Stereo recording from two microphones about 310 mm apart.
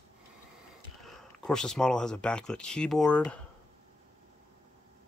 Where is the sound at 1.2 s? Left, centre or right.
Centre.